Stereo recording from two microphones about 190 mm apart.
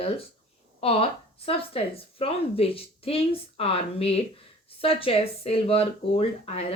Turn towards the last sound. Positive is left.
turn(degrees=30)  # may be behind; listen again after turning